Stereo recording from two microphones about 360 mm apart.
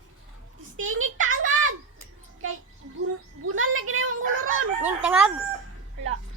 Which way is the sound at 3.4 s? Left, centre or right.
Right.